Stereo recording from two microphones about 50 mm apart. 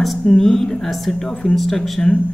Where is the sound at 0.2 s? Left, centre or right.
Centre.